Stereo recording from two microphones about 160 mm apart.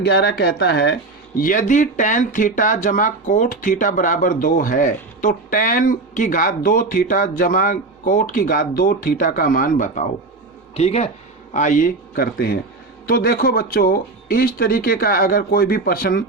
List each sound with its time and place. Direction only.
0.0 s speech: 85° left
1.4 s speech: 55° left (ahead or behind)
10.8 s speech: 40° left (ahead or behind)
11.5 s speech: 50° left (ahead or behind); by 16.2 s 75° left (ahead or behind)